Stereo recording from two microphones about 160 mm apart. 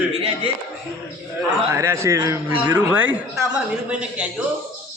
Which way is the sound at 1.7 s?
15° right (ahead or behind).